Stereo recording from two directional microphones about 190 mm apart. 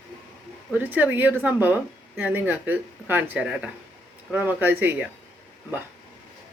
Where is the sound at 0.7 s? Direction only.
10° right (ahead or behind).